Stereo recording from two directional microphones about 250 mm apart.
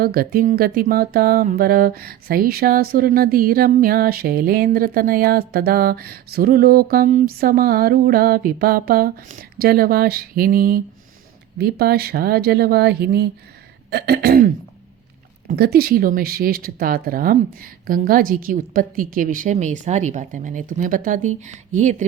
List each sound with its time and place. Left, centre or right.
0.0 s speech: right